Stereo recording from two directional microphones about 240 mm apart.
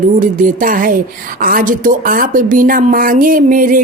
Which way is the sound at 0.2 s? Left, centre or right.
Right.